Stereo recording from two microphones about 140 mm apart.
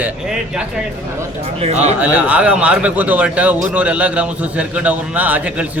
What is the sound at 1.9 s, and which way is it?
A man's voice, 10° right (ahead or behind).